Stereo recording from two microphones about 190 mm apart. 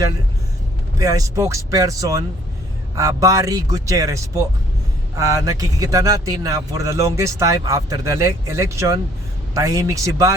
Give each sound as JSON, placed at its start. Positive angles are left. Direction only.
{"t": 0.9, "sound": "speech", "side_deg": -20}